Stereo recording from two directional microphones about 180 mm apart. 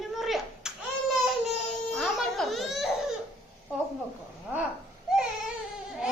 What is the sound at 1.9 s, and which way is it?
Baby cry, centre (ahead or behind).